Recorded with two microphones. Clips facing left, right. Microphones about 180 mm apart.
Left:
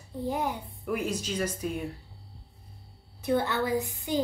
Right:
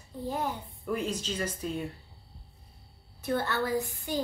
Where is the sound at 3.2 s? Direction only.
15° left (ahead or behind).